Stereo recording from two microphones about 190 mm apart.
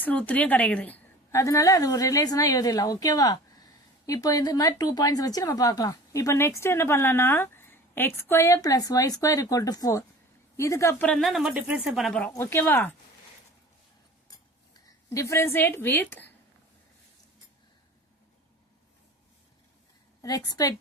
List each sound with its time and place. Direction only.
0.0 s a woman's voice: 5° left (ahead or behind)
12.3 s a woman's voice: 15° left (ahead or behind)
14.3 s a sound: 20° left (ahead or behind)
20.2 s a woman's voice: 20° left (ahead or behind)